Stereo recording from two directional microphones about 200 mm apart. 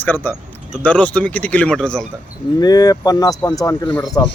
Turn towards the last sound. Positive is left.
turn(degrees=10)  # may be behind; listen again after turning